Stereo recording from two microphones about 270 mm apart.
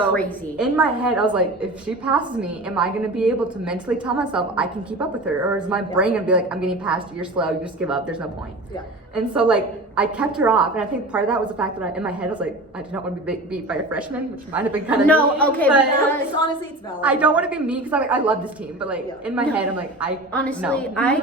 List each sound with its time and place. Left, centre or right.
0.1 s a woman's voice: centre
15.0 s a woman's voice: centre
17.0 s a woman's voice: centre